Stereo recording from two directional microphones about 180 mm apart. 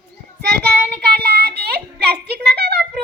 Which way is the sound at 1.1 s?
60° right (ahead or behind).